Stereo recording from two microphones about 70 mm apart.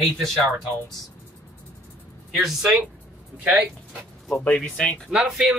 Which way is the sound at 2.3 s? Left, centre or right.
Centre.